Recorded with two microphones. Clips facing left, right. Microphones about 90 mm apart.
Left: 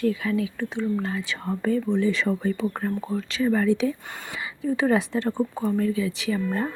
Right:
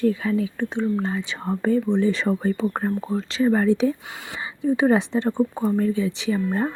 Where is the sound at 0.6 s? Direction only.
20° right (ahead or behind).